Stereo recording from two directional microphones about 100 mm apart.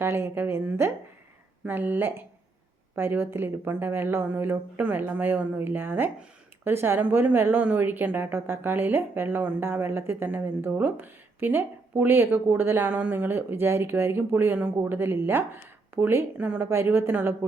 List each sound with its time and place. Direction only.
0.0 s speech: 25° right (ahead or behind)